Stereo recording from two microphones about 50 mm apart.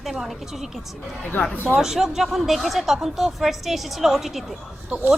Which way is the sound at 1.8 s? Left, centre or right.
Centre.